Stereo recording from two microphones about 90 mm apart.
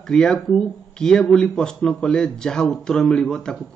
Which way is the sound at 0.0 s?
5° left (ahead or behind).